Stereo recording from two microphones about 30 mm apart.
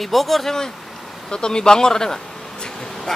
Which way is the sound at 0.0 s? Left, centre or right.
Centre.